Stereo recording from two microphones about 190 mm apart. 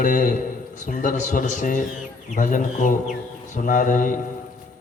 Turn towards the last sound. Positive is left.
turn(degrees=40)  # may be behind; listen again after turning